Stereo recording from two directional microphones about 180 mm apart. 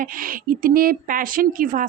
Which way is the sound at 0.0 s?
50° right (ahead or behind).